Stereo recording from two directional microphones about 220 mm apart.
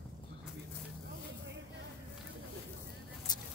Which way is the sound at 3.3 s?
20° left (ahead or behind).